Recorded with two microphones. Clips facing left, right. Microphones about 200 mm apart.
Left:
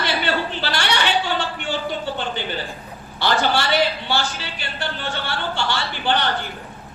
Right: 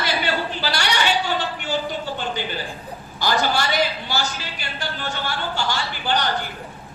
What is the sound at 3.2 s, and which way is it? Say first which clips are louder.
A man's voice: left 1 dB; 40° right (ahead or behind).